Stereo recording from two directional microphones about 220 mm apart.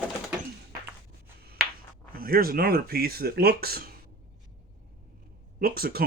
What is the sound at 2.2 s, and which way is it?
Speech, 40° right (ahead or behind).